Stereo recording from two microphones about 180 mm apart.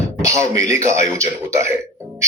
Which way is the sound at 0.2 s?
15° right (ahead or behind).